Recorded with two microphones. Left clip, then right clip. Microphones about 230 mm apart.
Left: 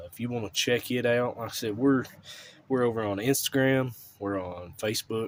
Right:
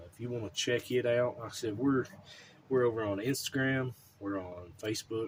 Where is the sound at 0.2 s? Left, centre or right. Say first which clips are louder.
Left 6 dB; left.